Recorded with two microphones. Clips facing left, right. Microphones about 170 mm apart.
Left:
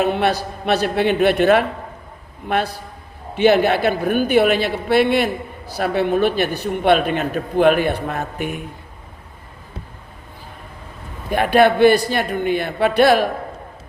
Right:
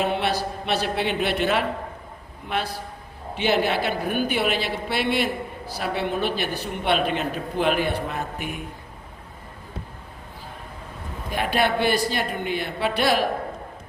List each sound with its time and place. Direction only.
0.0 s a man's voice: 50° left (ahead or behind)
3.3 s a man's voice: 55° left (ahead or behind)
11.3 s a man's voice: 55° left (ahead or behind)